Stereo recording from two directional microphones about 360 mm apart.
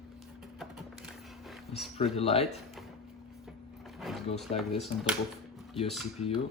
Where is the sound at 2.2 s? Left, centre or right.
Centre.